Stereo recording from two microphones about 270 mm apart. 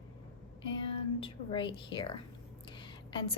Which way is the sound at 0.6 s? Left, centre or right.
Centre.